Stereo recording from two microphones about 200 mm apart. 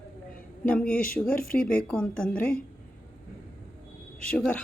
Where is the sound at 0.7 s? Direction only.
5° left (ahead or behind).